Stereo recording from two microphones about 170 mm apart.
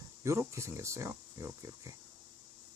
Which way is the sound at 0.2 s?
15° right (ahead or behind).